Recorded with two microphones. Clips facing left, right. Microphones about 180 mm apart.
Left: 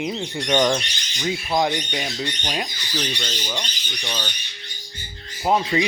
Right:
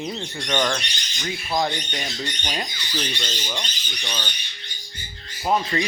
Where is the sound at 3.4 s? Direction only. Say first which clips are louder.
Left 2 dB; 5° left (ahead or behind).